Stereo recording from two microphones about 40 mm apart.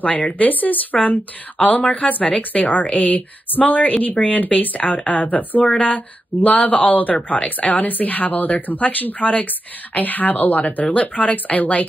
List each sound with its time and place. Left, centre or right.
0.0 s speech: left